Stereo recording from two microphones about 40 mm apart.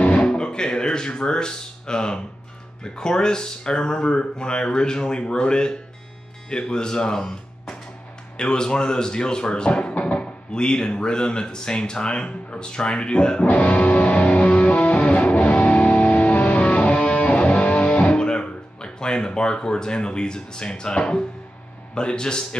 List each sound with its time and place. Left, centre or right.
0.0 s speech: left
13.5 s music: left
21.9 s speech: left